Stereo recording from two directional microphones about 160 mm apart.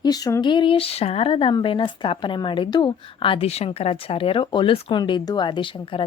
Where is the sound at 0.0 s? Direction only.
25° left (ahead or behind).